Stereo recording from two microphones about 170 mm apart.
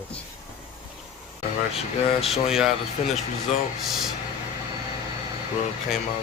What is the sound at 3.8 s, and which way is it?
Speech, centre (ahead or behind).